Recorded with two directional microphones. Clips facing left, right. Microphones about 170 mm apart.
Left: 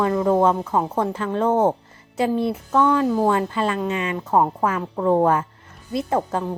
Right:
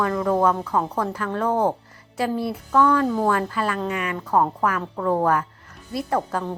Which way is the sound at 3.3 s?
25° left (ahead or behind).